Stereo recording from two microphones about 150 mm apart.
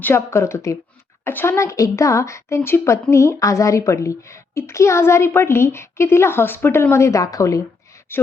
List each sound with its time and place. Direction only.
0.0 s a woman's voice: 15° left (ahead or behind)